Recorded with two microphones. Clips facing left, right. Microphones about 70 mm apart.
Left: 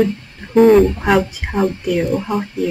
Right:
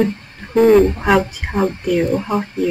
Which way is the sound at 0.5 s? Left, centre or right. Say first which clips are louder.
Left 1 dB; centre.